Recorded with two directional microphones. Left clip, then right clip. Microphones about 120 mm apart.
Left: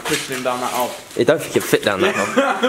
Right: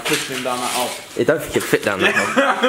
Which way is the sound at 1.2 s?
15° left (ahead or behind).